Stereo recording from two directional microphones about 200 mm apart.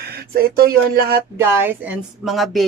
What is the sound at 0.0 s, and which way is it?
Speech, 50° right (ahead or behind).